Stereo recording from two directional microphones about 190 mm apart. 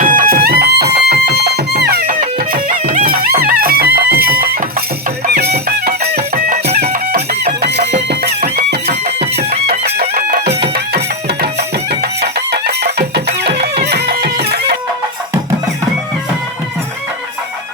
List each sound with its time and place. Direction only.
0.0 s music: 45° right (ahead or behind)
2.2 s music: 45° right (ahead or behind)